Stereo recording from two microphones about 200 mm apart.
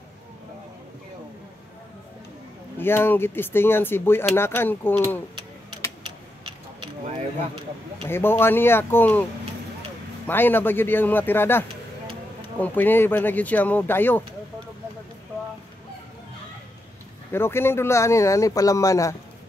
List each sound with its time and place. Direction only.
2.8 s speech: 10° left (ahead or behind)
6.4 s a sound: 30° right (ahead or behind)
8.1 s speech: 10° left (ahead or behind)
10.2 s speech: 10° left (ahead or behind)
17.3 s speech: 10° left (ahead or behind)